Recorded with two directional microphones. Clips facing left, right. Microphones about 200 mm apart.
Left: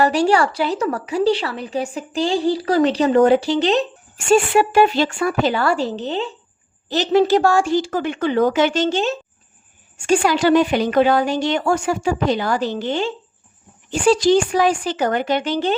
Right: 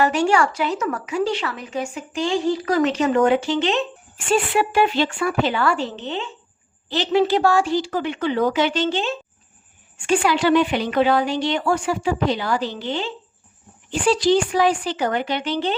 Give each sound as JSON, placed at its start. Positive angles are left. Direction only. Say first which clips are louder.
{"t": 0.0, "sound": "a woman's voice", "louder": "left 2 dB", "side_deg": 35}